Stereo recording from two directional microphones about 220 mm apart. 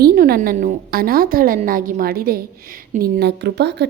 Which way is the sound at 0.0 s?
40° right (ahead or behind).